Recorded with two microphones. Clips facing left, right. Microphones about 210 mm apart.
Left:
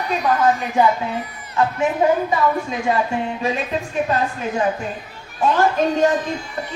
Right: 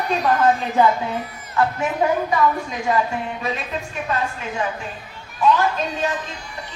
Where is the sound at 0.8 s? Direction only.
10° left (ahead or behind).